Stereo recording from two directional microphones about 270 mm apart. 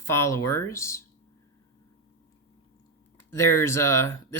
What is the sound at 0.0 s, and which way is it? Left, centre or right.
Speech, centre.